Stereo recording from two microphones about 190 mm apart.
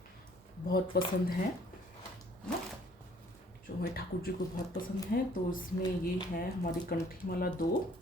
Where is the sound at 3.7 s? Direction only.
50° left (ahead or behind).